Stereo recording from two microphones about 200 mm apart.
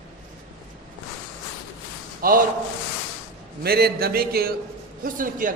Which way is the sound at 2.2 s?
45° right (ahead or behind).